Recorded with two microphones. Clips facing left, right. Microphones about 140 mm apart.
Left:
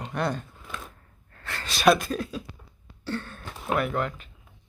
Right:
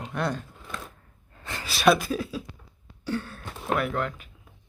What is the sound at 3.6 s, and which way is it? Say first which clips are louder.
Speech: even; centre (ahead or behind).